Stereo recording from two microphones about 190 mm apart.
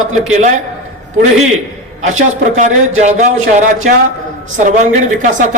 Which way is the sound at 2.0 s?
40° right (ahead or behind).